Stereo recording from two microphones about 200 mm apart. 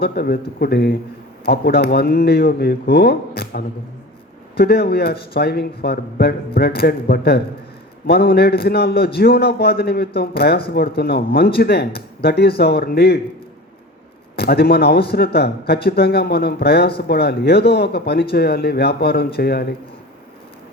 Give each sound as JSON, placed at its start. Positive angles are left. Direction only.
{"t": 0.0, "sound": "speech", "side_deg": 50}
{"t": 14.3, "sound": "speech", "side_deg": 50}